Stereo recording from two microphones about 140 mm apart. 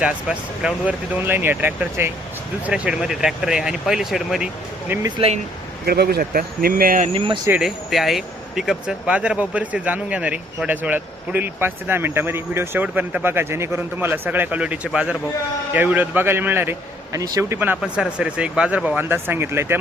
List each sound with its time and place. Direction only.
0.0 s speech: 10° right (ahead or behind)
4.9 s speech: 15° right (ahead or behind)
5.8 s speech: 90° right
7.1 s speech: 40° right (ahead or behind)
7.6 s speech: centre (ahead or behind); by 17.6 s 25° right (ahead or behind)
17.6 s speech: 10° right (ahead or behind)